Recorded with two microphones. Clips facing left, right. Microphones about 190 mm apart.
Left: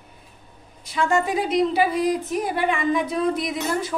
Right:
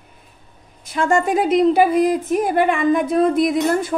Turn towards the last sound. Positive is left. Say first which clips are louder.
# right 8 dB
turn(degrees=-50)  # may be behind; listen again after turning